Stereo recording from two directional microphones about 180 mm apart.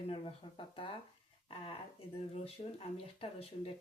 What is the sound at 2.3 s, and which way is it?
Speech, 35° left (ahead or behind).